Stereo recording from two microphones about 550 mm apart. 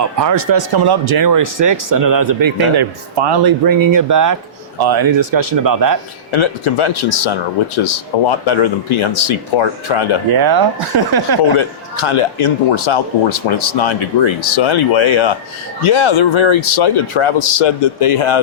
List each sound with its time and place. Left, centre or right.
0.0 s speech: right
6.3 s a man's voice: left
10.3 s speech: right
11.5 s a man's voice: left